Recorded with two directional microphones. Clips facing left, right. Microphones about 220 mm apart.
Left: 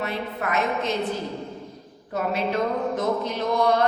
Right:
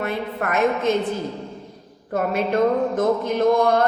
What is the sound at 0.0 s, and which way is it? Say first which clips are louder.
Speech: right 3 dB; 50° right (ahead or behind).